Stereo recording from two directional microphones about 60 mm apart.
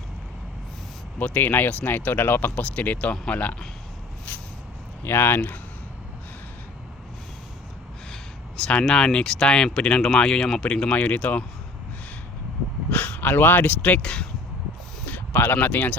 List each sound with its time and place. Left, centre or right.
1.2 s speech: left
4.3 s a sound: left
5.0 s speech: left
8.1 s speech: centre
12.9 s speech: left
15.0 s a sound: left
15.5 s speech: left